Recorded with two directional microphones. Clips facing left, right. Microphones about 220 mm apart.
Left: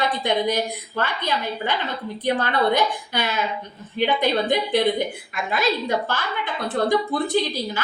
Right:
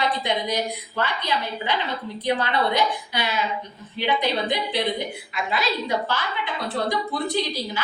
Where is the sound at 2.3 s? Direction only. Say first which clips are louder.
Left 3 dB; 50° left (ahead or behind).